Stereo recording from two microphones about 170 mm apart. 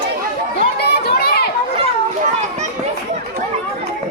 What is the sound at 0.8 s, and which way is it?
Crowd, 70° left (ahead or behind).